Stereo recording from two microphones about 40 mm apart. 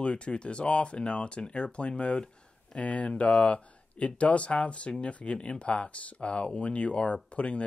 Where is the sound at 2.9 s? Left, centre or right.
Left.